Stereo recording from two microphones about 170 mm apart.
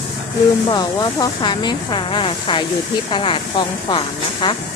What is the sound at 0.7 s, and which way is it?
Speech, 25° left (ahead or behind).